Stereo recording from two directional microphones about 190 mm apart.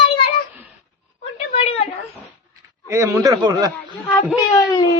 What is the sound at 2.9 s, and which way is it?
A man's voice, 15° right (ahead or behind).